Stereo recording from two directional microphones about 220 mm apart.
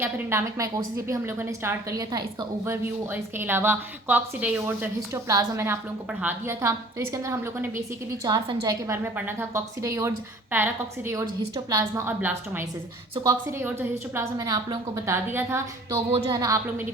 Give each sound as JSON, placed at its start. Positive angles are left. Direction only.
{"t": 0.0, "sound": "a woman's voice", "side_deg": -10}